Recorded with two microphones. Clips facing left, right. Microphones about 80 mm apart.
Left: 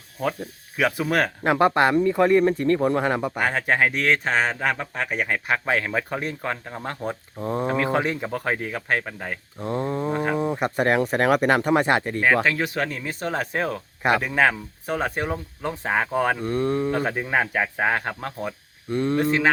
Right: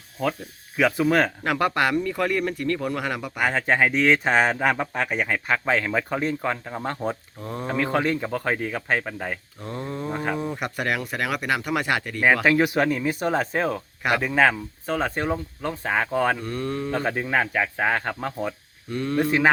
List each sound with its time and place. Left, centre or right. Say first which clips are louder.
0.8 s speech: right 2 dB; centre
1.5 s speech: left 4 dB; left
3.4 s speech: right 2 dB; centre
7.3 s speech: left 6 dB; left
7.7 s speech: right 2 dB; centre
9.6 s speech: left 10 dB; left
10.1 s speech: left 1 dB; centre
10.3 s speech: left 5 dB; centre
12.2 s speech: right 6 dB; centre
16.4 s speech: left 5 dB; left
16.9 s speech: left 1 dB; centre
18.9 s speech: left 4 dB; left